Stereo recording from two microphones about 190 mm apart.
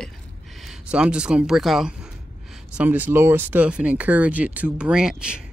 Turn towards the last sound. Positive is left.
turn(degrees=-5)  # may be behind; listen again after turning